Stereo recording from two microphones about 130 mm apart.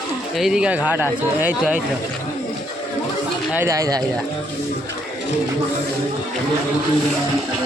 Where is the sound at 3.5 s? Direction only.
25° right (ahead or behind).